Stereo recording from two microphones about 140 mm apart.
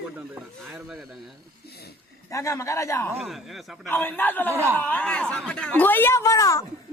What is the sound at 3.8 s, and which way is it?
Speech, 15° left (ahead or behind).